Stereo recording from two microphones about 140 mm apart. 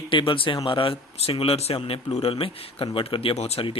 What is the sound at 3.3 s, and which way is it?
Speech, 50° left (ahead or behind).